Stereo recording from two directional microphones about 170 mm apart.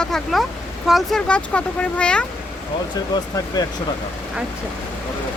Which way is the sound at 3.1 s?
25° left (ahead or behind).